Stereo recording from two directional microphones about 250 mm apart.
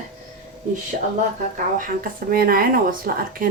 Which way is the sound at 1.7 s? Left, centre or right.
Right.